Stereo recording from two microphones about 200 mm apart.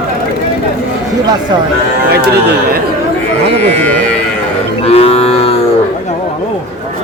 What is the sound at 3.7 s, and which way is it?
Speech, 10° left (ahead or behind).